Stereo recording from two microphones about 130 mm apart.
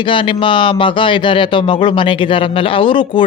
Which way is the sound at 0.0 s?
40° left (ahead or behind).